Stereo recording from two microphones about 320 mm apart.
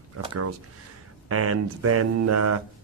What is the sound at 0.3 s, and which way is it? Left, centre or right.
Speech, right.